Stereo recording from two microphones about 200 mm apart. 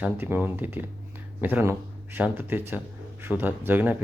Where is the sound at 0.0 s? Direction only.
10° right (ahead or behind).